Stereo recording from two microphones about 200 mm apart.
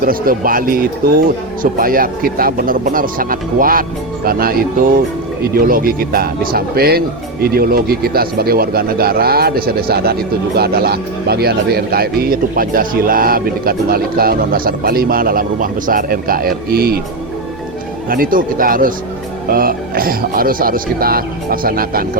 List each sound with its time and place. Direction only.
0.0 s speech: 45° right (ahead or behind)
18.1 s speech: 45° right (ahead or behind)